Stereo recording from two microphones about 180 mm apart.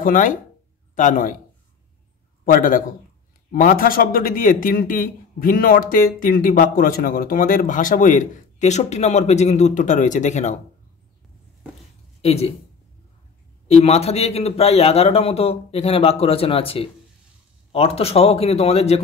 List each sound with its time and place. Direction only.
0.0 s a man's voice: 45° left (ahead or behind)
2.4 s a man's voice: 50° left (ahead or behind)
12.2 s speech: 35° left (ahead or behind)
13.7 s a man's voice: 35° left (ahead or behind)